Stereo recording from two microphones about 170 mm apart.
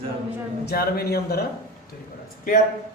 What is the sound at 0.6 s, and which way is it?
Speech, 65° left (ahead or behind).